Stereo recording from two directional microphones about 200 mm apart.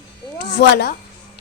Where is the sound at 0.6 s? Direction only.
55° left (ahead or behind).